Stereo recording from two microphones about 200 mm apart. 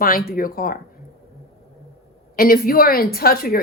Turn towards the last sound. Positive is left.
turn(degrees=45)  # may be behind; listen again after turning